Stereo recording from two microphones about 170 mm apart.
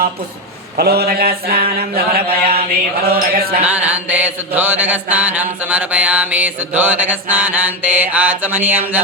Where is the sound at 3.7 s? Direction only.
10° right (ahead or behind).